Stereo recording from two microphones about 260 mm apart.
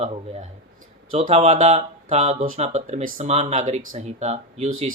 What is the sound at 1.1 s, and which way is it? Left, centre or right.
Speech, right.